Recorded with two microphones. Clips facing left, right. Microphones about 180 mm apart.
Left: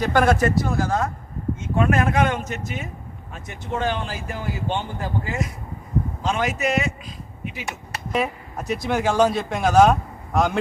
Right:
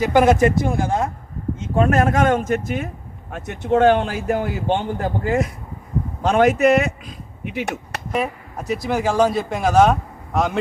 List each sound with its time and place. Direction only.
0.0 s speech: 15° right (ahead or behind)
0.6 s speech: 25° right (ahead or behind)
1.7 s speech: 40° right (ahead or behind); by 2.9 s 55° right (ahead or behind)
3.3 s speech: 65° right (ahead or behind)
8.1 s speech: centre (ahead or behind)